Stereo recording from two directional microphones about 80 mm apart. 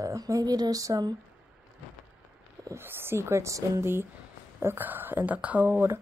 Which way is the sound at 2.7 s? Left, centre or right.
Right.